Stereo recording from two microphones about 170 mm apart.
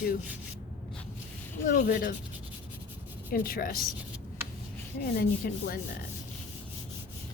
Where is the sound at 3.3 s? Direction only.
55° left (ahead or behind).